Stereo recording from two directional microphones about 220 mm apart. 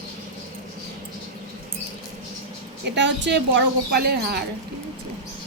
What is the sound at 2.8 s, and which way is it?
A woman's voice, 55° right (ahead or behind).